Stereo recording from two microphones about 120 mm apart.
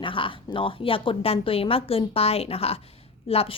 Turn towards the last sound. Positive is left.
turn(degrees=55)  # may be behind; listen again after turning